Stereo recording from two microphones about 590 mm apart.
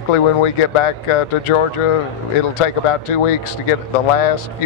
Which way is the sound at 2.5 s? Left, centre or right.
Left.